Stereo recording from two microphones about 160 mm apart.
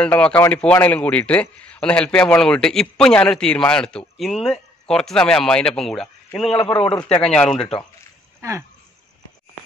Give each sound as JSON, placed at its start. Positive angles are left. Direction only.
{"t": 0.0, "sound": "a man's voice", "side_deg": 10}
{"t": 6.5, "sound": "a man's voice", "side_deg": 30}
{"t": 7.2, "sound": "a man's voice", "side_deg": 5}
{"t": 8.4, "sound": "speech", "side_deg": -15}